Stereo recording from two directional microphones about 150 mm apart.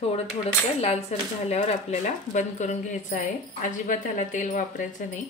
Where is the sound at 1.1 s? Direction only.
45° left (ahead or behind).